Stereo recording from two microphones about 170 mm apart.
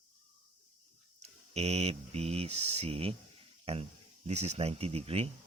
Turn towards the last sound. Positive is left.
turn(degrees=-35)  # may be behind; listen again after turning